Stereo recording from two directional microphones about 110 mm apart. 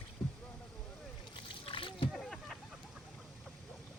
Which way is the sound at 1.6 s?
50° left (ahead or behind).